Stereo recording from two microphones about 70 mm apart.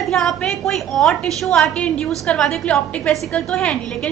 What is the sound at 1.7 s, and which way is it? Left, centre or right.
A woman's voice, centre.